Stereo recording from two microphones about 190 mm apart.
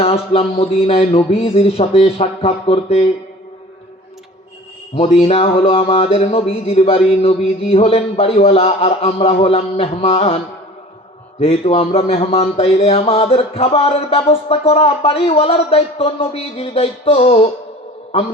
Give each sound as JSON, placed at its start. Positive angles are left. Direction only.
{"t": 0.0, "sound": "a man's voice", "side_deg": 30}
{"t": 4.9, "sound": "a man's voice", "side_deg": 35}